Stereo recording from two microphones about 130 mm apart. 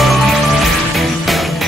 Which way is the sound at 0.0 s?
Centre (ahead or behind).